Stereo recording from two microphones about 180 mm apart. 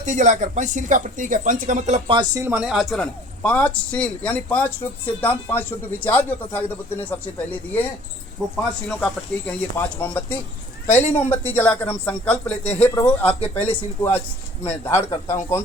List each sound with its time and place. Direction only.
0.0 s speech: 40° right (ahead or behind)
2.0 s a man's voice: 25° right (ahead or behind); by 15.6 s 15° left (ahead or behind)